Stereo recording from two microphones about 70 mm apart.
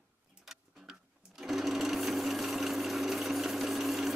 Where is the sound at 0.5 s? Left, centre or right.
Centre.